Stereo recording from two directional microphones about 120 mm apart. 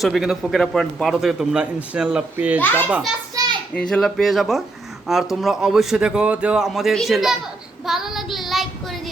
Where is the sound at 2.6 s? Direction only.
15° left (ahead or behind).